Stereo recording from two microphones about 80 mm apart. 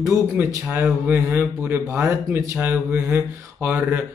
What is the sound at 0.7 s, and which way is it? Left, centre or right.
Speech, right.